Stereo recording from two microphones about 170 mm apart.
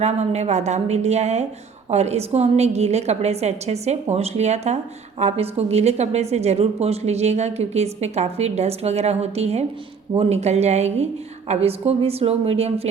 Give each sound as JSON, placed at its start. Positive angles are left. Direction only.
{"t": 0.0, "sound": "a woman's voice", "side_deg": -40}